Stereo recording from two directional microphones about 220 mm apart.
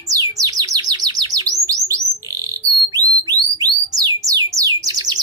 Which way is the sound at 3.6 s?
15° right (ahead or behind).